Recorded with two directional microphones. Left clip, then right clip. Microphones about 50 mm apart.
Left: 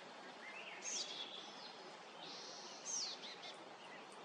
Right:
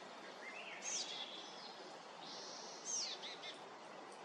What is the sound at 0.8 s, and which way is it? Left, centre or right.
Bird, centre.